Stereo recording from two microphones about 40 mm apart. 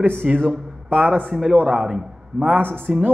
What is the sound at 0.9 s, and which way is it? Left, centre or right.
Speech, right.